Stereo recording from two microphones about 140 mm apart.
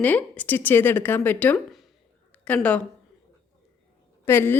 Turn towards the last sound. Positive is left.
turn(degrees=15)  # may be behind; listen again after turning